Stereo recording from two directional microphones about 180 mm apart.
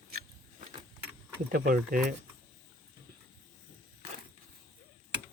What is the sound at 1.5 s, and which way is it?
Speech, 50° right (ahead or behind).